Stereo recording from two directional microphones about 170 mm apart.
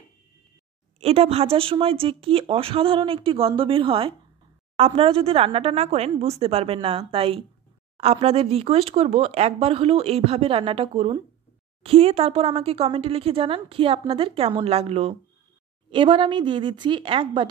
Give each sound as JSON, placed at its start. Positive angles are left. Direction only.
{"t": 0.9, "sound": "speech", "side_deg": -35}